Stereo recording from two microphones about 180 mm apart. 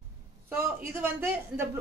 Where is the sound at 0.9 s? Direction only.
10° right (ahead or behind).